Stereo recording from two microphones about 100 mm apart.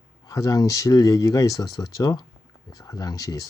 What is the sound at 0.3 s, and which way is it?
Speech, 35° left (ahead or behind).